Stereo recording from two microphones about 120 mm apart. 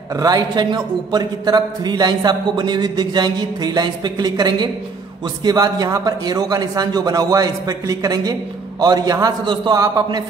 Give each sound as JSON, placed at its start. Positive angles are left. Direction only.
{"t": 0.1, "sound": "a man's voice", "side_deg": -30}